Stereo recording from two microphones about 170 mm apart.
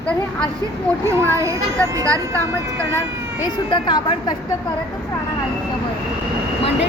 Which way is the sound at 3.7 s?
30° left (ahead or behind).